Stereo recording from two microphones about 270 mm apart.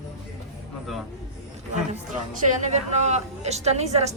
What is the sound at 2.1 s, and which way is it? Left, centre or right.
Speech, right.